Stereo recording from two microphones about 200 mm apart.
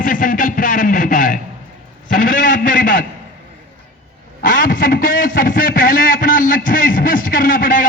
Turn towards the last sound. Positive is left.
turn(degrees=45)  # may be behind; listen again after turning